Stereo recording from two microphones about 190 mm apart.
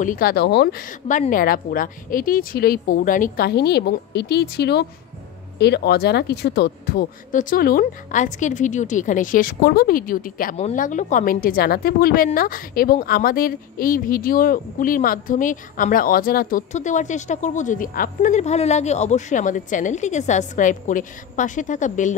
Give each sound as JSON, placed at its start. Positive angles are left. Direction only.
{"t": 0.0, "sound": "a woman's voice", "side_deg": 50}